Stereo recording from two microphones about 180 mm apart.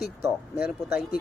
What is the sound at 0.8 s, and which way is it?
Speech, 15° right (ahead or behind).